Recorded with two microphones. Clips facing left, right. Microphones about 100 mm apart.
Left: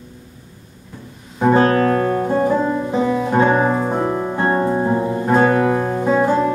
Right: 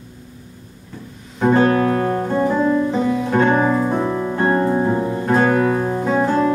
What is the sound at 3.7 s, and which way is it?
Music, 30° left (ahead or behind).